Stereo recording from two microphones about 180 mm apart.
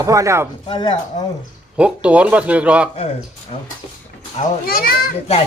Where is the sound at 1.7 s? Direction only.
5° right (ahead or behind).